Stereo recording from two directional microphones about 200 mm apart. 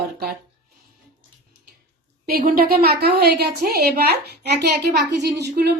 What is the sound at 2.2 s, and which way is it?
A woman's voice, 45° right (ahead or behind).